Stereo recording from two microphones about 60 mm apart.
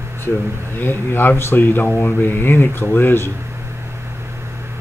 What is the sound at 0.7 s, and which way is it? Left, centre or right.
Speech, left.